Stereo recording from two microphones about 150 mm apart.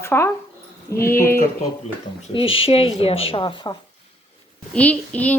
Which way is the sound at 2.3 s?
40° left (ahead or behind).